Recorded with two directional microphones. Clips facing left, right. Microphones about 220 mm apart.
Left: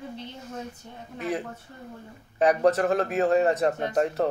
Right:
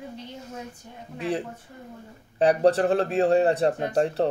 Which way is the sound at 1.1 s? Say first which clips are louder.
Right 2 dB; 30° right (ahead or behind).